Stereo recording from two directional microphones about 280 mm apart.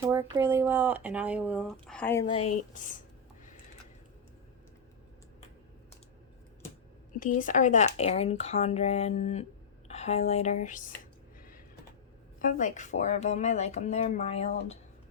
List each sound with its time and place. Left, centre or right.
0.1 s speech: centre
2.2 s speech: centre
7.2 s speech: left
12.4 s speech: left